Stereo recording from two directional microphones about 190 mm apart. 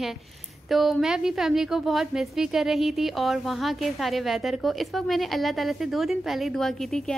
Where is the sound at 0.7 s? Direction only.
Centre (ahead or behind).